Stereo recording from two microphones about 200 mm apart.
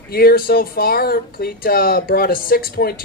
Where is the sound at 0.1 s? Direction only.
50° left (ahead or behind).